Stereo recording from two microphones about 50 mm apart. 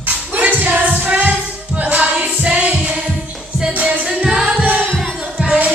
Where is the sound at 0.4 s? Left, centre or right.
Right; by 4.6 s centre.